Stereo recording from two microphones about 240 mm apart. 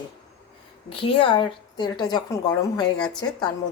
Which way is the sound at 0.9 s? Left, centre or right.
Left.